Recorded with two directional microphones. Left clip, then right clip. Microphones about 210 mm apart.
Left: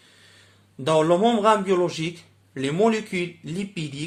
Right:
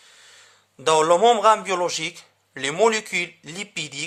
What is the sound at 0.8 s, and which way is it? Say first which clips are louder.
A man's voice: right 3 dB; 45° right (ahead or behind).